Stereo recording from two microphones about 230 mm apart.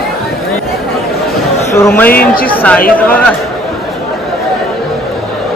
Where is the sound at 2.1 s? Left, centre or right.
Left.